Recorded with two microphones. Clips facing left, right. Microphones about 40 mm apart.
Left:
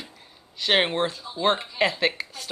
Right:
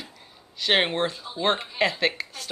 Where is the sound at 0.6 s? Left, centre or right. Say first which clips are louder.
Even; centre.